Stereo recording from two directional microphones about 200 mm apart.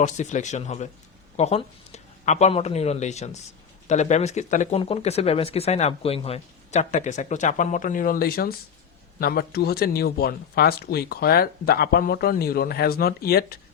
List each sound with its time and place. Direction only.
0.0 s speech: 35° left (ahead or behind)